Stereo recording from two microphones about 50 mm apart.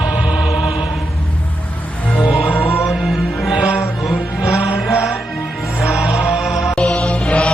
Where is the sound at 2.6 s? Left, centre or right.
Left.